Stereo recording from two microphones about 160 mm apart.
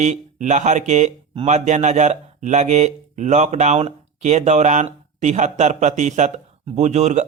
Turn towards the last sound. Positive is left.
turn(degrees=-45)  # may be behind; listen again after turning